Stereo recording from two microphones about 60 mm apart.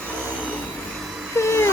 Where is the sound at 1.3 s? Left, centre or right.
Left.